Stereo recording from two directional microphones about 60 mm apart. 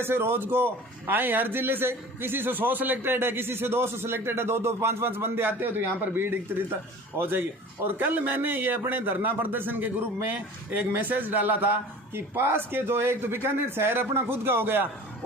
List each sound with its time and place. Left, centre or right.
0.0 s a man's voice: right